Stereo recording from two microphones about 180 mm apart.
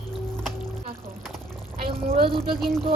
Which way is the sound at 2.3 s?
30° right (ahead or behind).